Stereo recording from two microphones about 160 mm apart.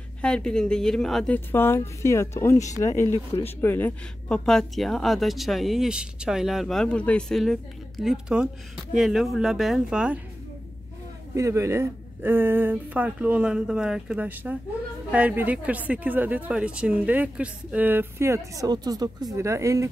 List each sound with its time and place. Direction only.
0.2 s speech: 5° left (ahead or behind)
11.3 s speech: 20° right (ahead or behind)